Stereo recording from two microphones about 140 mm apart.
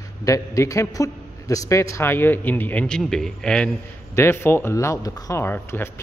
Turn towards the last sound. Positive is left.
turn(degrees=15)  # may be behind; listen again after turning